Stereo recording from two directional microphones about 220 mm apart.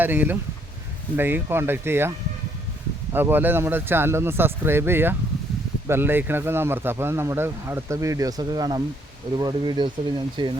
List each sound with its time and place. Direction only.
0.0 s speech: 10° right (ahead or behind)